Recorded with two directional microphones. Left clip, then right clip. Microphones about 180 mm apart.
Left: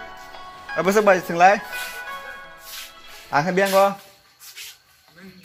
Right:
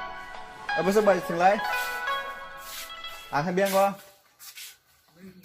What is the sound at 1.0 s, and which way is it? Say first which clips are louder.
Speech: left 9 dB; 20° left (ahead or behind).